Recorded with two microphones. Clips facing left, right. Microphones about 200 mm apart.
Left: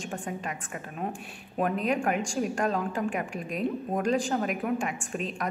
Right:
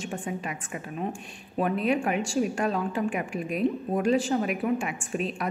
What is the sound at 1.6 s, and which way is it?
Speech, 40° left (ahead or behind).